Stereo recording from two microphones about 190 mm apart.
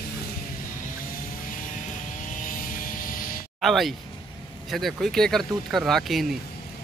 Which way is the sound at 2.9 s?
45° left (ahead or behind).